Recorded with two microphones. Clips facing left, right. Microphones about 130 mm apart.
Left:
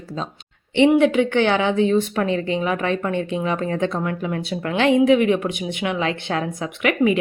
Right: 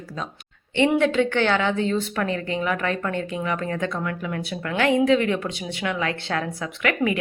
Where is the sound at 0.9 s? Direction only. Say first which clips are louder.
Left 4 dB; 15° left (ahead or behind).